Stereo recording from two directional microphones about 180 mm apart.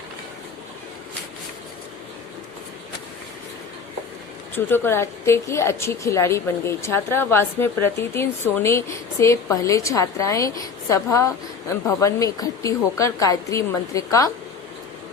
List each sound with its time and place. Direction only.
4.5 s a woman's voice: 10° left (ahead or behind)